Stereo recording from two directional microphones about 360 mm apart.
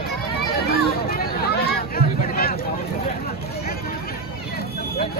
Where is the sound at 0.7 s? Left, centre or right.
Left.